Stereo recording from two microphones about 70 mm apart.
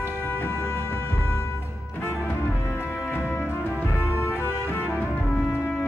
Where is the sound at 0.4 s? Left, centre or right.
Left.